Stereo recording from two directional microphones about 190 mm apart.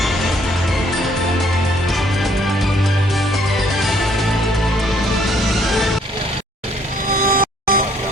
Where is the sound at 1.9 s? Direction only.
Centre (ahead or behind).